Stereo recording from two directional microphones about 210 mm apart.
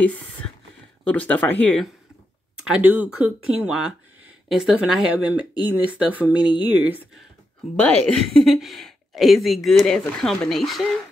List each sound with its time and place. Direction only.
0.0 s speech: 5° left (ahead or behind)
2.6 s a woman's voice: 5° right (ahead or behind)
7.8 s a woman's voice: 5° left (ahead or behind)